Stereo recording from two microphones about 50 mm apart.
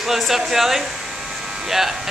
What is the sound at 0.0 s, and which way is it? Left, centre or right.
Speech, centre.